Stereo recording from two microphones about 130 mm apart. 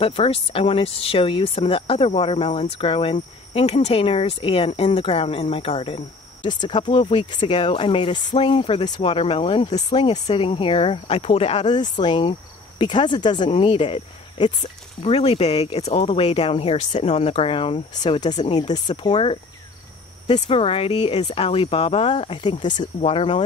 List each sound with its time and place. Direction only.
0.0 s speech: 45° left (ahead or behind)
6.4 s speech: 35° left (ahead or behind); by 11.6 s 50° left (ahead or behind)
11.6 s speech: 35° left (ahead or behind)
20.3 s speech: 50° left (ahead or behind)
22.6 s speech: 70° left (ahead or behind); by 23.4 s 45° left (ahead or behind)